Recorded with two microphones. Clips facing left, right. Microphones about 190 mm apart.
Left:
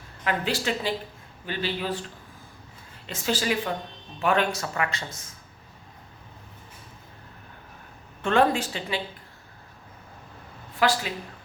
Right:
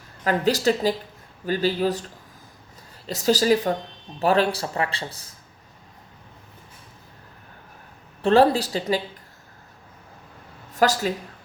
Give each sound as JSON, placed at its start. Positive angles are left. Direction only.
{"t": 0.3, "sound": "speech", "side_deg": -40}
{"t": 3.1, "sound": "speech", "side_deg": -40}
{"t": 8.2, "sound": "speech", "side_deg": -35}
{"t": 10.8, "sound": "speech", "side_deg": -40}